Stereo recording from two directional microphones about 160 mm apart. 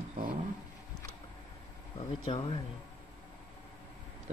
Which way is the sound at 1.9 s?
35° left (ahead or behind).